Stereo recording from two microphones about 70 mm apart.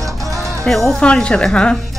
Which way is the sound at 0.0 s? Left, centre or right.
Right.